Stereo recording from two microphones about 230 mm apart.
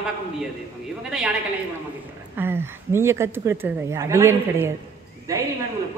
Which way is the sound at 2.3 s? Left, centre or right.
Centre.